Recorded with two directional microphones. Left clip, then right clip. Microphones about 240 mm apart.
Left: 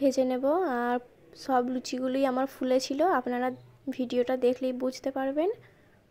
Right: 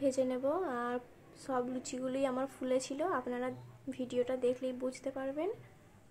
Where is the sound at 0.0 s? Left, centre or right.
Left.